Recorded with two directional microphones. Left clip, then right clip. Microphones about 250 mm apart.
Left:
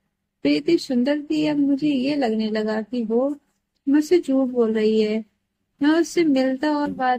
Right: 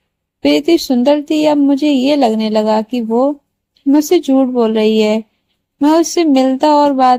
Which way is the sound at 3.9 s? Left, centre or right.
Right.